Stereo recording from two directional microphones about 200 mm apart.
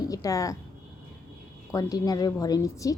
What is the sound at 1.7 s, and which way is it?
A woman's voice, 15° left (ahead or behind).